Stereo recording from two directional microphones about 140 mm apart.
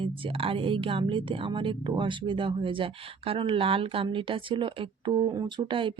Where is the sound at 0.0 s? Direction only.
40° right (ahead or behind).